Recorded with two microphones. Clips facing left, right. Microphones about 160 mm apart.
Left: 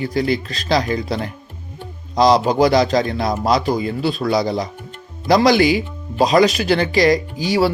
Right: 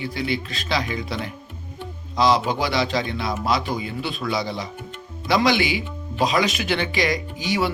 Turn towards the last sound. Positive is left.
turn(degrees=35)  # may be behind; listen again after turning